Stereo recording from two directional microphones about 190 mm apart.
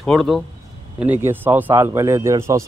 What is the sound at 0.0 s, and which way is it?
A man's voice, centre (ahead or behind).